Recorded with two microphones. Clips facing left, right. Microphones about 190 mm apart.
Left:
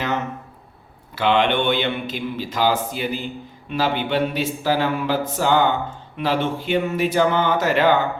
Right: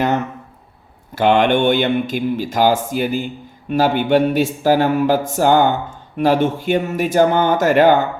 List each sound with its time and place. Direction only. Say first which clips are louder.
1.1 s speech: right 5 dB; 50° right (ahead or behind)